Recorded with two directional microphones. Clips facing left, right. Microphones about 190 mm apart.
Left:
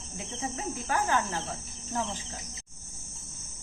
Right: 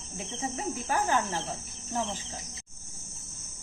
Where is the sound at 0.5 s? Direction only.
15° right (ahead or behind).